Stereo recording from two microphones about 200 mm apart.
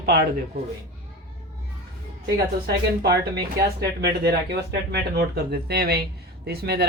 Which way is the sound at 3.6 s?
50° right (ahead or behind).